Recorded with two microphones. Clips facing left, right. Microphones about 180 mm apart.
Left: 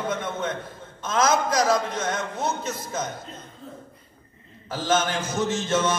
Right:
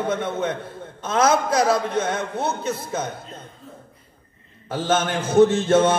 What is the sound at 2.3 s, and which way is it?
Speech, 60° right (ahead or behind).